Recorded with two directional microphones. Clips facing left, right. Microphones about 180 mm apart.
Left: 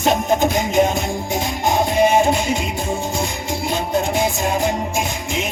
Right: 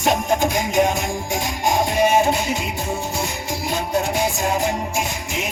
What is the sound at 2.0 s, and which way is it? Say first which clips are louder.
Music: left 2 dB; 20° left (ahead or behind).